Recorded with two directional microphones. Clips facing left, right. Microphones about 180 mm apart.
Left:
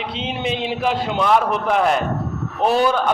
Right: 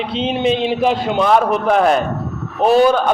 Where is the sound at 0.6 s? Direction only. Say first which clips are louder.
Right 5 dB; 20° right (ahead or behind).